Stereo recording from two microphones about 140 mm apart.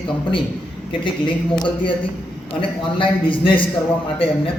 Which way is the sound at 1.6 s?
35° left (ahead or behind).